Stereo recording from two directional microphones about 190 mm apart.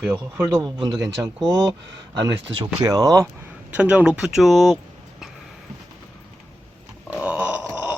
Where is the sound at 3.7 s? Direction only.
5° right (ahead or behind).